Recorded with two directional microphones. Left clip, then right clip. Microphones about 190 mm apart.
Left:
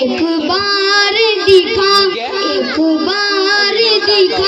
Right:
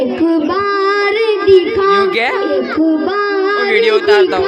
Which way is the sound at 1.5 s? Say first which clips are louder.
Right 1 dB; 30° left (ahead or behind).